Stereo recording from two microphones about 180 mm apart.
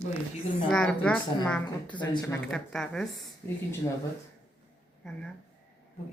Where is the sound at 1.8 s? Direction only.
25° left (ahead or behind).